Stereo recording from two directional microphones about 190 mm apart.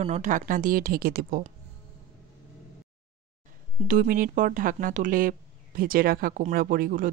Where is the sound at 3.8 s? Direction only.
45° right (ahead or behind).